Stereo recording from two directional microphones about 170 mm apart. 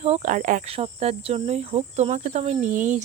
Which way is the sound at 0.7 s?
40° right (ahead or behind).